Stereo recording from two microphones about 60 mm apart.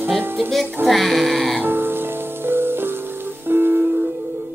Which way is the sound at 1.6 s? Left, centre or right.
Right.